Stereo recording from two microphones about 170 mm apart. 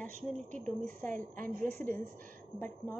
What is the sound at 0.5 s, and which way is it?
Speech, 45° right (ahead or behind).